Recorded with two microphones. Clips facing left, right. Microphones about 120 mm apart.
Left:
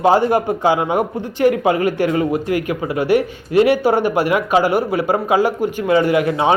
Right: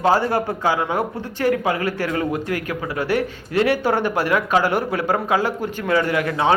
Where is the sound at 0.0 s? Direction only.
20° left (ahead or behind).